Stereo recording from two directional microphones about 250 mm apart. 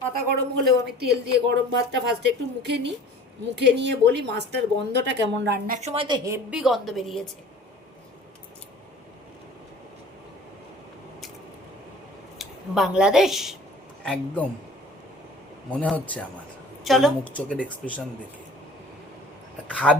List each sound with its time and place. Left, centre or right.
0.6 s a woman's voice: right; by 7.3 s centre
12.4 s speech: centre
15.7 s speech: centre
19.6 s speech: centre